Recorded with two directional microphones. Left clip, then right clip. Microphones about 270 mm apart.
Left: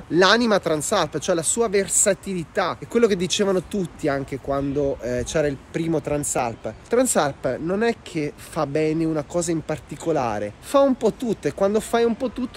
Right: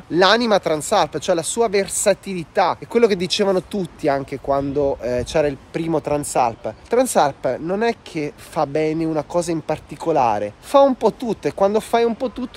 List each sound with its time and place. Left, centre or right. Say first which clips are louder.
0.1 s speech: right 2 dB; centre